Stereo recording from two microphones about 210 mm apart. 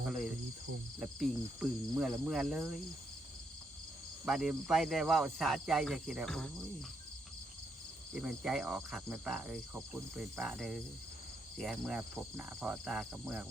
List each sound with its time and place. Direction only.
0.9 s speech: 5° right (ahead or behind)
4.3 s speech: centre (ahead or behind)
8.1 s speech: centre (ahead or behind)